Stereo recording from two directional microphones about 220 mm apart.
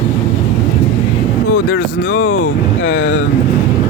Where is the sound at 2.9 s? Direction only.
70° left (ahead or behind).